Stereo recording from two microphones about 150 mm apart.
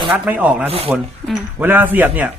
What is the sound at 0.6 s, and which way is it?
Speech, 40° right (ahead or behind).